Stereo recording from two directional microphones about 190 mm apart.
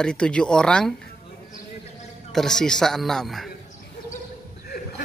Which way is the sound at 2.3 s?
5° left (ahead or behind).